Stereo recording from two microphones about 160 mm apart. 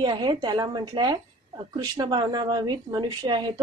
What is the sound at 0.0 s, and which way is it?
A woman's voice, 30° right (ahead or behind).